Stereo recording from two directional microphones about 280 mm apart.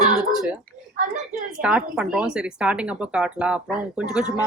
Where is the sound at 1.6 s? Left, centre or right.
Centre.